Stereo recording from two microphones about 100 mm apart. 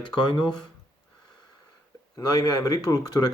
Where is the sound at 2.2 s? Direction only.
40° left (ahead or behind).